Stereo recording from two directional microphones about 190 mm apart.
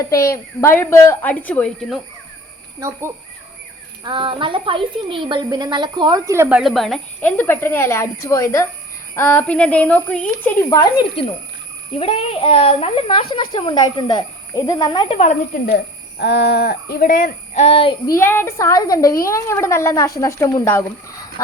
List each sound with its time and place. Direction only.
0.0 s a woman's voice: 15° left (ahead or behind)
4.0 s a woman's voice: 25° right (ahead or behind)
6.6 s a woman's voice: centre (ahead or behind); by 11.3 s 20° left (ahead or behind)
11.9 s speech: 30° left (ahead or behind)
15.7 s speech: 60° left (ahead or behind); by 17.9 s 30° left (ahead or behind)
18.0 s a woman's voice: 15° left (ahead or behind)